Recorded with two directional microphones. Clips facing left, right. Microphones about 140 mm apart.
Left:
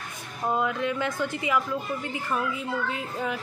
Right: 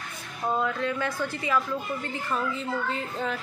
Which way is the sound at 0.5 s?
15° left (ahead or behind).